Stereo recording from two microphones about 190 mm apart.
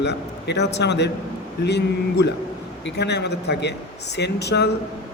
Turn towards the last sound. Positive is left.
turn(degrees=60)  # may be behind; listen again after turning